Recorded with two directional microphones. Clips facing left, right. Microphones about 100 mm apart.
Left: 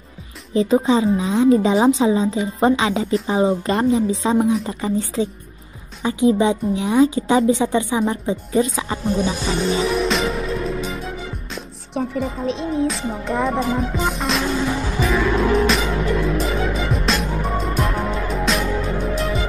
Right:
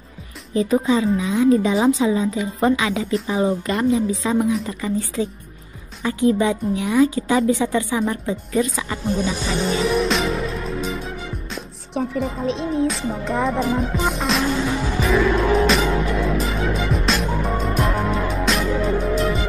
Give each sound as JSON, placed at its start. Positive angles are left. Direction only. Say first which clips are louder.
{"t": 0.6, "sound": "a woman's voice", "louder": "left 2 dB", "side_deg": 25}
{"t": 9.6, "sound": "music", "louder": "even", "side_deg": 0}
{"t": 11.5, "sound": "speech", "louder": "even", "side_deg": 0}
{"t": 15.0, "sound": "music", "louder": "right 1 dB", "side_deg": 0}